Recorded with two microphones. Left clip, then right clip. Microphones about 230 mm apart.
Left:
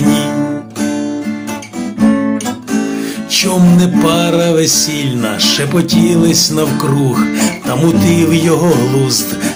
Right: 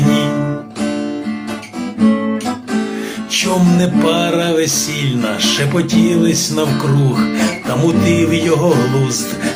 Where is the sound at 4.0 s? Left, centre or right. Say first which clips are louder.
Left 3 dB; left.